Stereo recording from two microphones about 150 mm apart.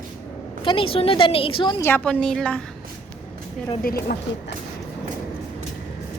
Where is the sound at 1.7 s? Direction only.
15° left (ahead or behind).